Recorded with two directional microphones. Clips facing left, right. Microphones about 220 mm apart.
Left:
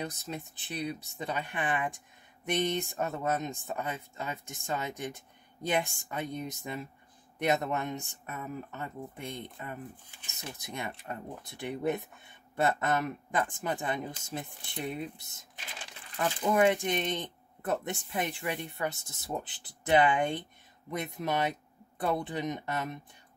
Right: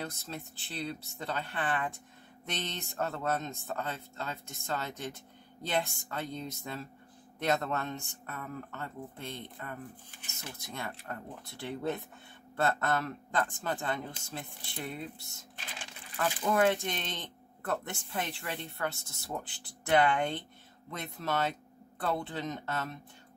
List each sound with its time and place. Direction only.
0.0 s speech: 15° left (ahead or behind)